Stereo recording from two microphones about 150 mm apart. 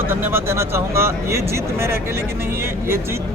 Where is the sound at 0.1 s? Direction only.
15° right (ahead or behind).